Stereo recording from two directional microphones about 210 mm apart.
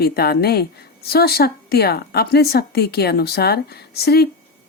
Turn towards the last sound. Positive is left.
turn(degrees=50)  # may be behind; listen again after turning